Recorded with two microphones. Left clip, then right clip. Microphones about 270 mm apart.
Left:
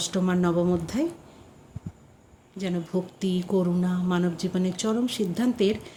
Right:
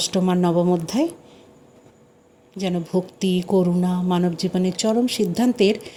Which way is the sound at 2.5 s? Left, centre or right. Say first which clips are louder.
Right 6 dB; centre.